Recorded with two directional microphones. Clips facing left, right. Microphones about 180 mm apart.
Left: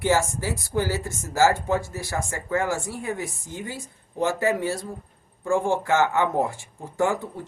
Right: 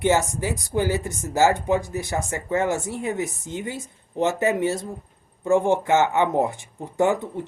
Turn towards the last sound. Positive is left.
turn(degrees=-20)  # may be behind; listen again after turning